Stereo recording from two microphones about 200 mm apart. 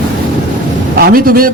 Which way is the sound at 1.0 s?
45° right (ahead or behind).